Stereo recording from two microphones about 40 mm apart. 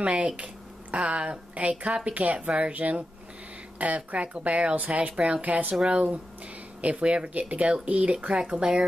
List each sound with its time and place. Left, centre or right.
0.0 s a woman's voice: right
1.9 s speech: right
4.7 s speech: right
5.1 s speech: right
5.4 s speech: right
5.8 s speech: right